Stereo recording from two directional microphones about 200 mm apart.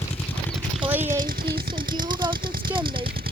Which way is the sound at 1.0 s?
40° right (ahead or behind).